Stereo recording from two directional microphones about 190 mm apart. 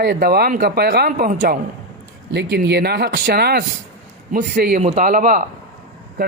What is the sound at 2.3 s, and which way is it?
Speech, 60° right (ahead or behind).